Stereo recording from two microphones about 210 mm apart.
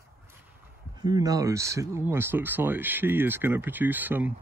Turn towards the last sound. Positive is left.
turn(degrees=-10)  # may be behind; listen again after turning